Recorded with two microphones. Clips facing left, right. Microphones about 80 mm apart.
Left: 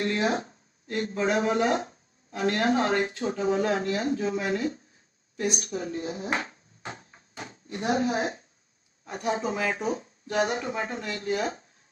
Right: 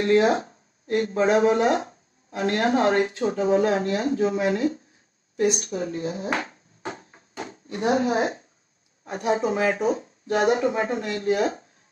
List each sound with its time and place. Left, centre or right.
0.0 s speech: right